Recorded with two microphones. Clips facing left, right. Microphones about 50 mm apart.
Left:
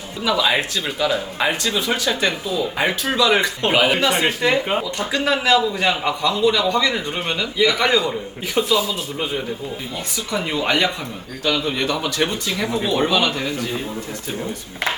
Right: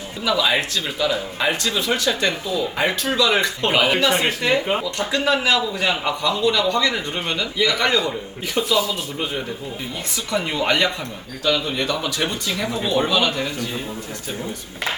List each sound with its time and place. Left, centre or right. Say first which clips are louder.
0.3 s speech: even; centre
8.6 s speech: left 2 dB; centre
10.3 s speech: even; centre